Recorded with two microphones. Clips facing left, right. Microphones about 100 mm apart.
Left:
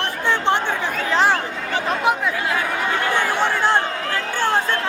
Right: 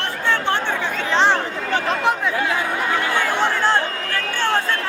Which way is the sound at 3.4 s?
15° left (ahead or behind).